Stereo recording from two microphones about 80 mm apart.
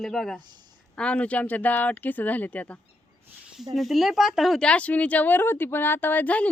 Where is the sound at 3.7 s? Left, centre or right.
Centre.